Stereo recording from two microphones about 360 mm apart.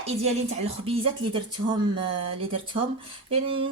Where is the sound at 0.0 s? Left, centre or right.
Centre.